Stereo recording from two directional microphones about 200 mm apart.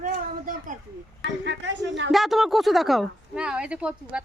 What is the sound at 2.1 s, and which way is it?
A woman's voice, centre (ahead or behind).